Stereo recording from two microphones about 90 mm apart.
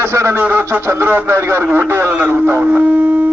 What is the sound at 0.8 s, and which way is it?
A man's voice, 30° right (ahead or behind).